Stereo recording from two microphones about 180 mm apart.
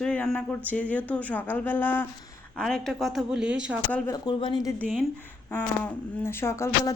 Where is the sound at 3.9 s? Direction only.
10° left (ahead or behind).